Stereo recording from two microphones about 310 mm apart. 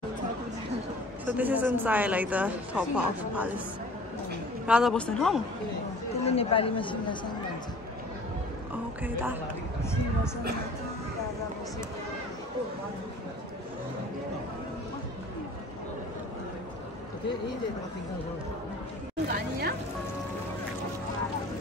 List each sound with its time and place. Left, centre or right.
1.2 s a woman's voice: centre
4.6 s a woman's voice: centre
6.2 s speech: centre
9.0 s speech: centre
19.2 s a woman's voice: right